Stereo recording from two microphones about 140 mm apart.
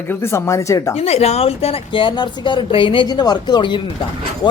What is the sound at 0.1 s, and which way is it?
Speech, 20° left (ahead or behind).